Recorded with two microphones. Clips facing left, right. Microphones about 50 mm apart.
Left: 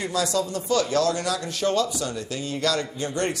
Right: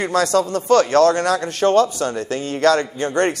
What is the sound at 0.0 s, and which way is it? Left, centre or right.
Speech, right.